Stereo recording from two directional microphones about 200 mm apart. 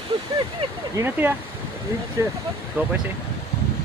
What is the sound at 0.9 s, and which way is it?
Speech, 10° right (ahead or behind).